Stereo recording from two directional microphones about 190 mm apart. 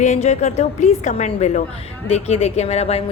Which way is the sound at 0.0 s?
35° left (ahead or behind).